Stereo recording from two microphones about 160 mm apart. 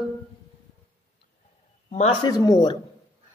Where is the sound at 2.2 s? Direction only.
25° left (ahead or behind).